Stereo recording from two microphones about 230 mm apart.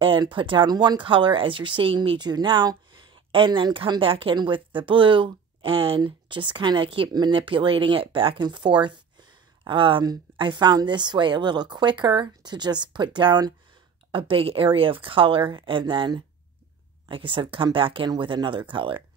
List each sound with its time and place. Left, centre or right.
0.0 s a woman's voice: right